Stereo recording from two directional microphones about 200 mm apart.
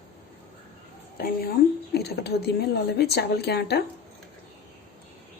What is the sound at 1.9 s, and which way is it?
A woman's voice, 55° left (ahead or behind).